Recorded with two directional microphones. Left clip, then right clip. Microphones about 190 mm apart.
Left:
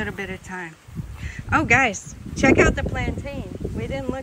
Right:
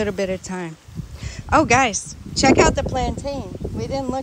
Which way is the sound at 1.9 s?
Centre (ahead or behind).